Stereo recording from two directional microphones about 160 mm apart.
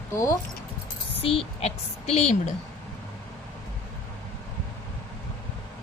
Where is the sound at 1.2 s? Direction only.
35° left (ahead or behind).